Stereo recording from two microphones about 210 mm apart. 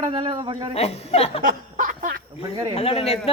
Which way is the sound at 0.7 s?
30° left (ahead or behind).